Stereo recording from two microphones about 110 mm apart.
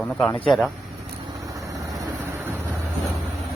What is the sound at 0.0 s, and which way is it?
Speech, 5° left (ahead or behind).